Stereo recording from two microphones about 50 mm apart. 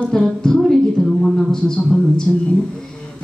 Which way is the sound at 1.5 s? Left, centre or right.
Centre.